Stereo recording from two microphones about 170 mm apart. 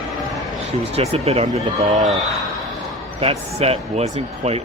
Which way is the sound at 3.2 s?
35° right (ahead or behind).